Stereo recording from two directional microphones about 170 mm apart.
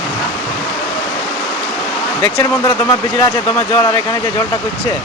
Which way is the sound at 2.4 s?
15° left (ahead or behind).